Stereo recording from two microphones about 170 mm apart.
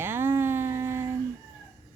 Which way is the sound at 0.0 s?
10° right (ahead or behind).